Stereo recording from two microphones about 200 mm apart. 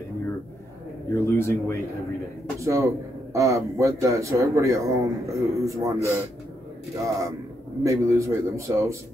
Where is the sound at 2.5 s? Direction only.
15° right (ahead or behind).